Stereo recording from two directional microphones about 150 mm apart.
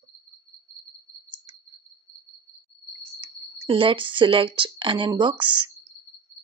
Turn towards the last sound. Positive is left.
turn(degrees=-35)  # may be behind; listen again after turning